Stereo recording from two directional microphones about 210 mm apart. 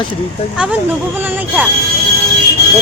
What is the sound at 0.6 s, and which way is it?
Speech, 5° right (ahead or behind).